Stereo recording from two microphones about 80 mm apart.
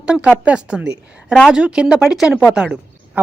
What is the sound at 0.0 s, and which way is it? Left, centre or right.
A woman's voice, centre.